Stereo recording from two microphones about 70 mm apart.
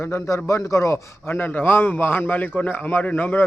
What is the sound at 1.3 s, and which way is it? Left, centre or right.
Speech, left.